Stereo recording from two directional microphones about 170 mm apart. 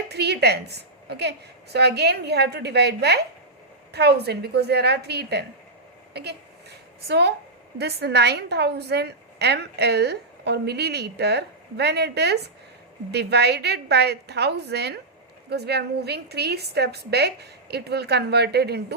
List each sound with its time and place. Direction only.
0.1 s a woman's voice: 75° right (ahead or behind)
6.1 s a sound: 75° right (ahead or behind)
7.8 s a woman's voice: 70° right (ahead or behind)